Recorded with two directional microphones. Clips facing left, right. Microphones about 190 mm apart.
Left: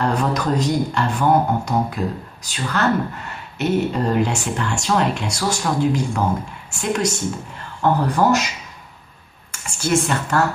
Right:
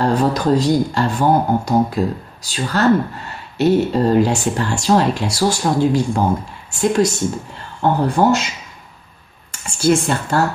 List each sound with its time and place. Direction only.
0.0 s speech: 30° right (ahead or behind)
9.5 s speech: 30° right (ahead or behind)